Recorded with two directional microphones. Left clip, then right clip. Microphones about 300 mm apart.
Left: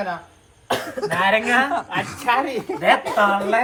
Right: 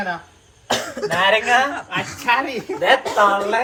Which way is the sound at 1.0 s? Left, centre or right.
Centre.